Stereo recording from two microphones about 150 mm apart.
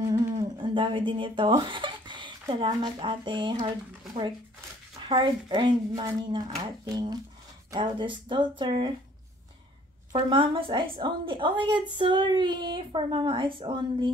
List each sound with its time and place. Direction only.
0.6 s a woman's voice: 35° right (ahead or behind)
5.0 s a woman's voice: 30° right (ahead or behind)
10.1 s a woman's voice: 35° right (ahead or behind)